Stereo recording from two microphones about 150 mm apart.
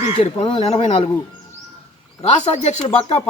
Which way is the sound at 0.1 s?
40° left (ahead or behind).